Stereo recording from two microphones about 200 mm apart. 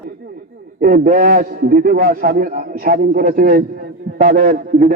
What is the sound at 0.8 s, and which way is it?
A man's voice, 45° right (ahead or behind).